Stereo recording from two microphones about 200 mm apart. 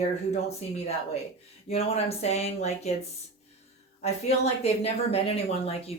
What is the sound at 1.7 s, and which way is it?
Speech, 30° left (ahead or behind).